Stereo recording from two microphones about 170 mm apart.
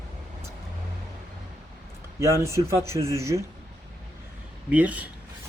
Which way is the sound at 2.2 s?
15° right (ahead or behind).